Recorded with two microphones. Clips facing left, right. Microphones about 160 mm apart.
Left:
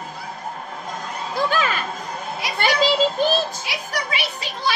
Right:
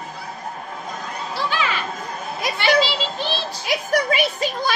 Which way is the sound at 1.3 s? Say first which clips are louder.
Left 4 dB; 45° left (ahead or behind).